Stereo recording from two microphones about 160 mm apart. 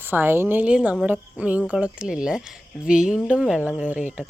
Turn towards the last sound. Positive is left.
turn(degrees=-10)  # may be behind; listen again after turning